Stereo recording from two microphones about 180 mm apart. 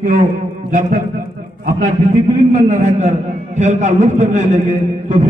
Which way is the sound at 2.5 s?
40° right (ahead or behind).